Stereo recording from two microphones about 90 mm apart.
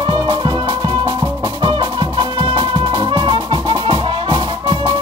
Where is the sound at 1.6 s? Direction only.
60° right (ahead or behind).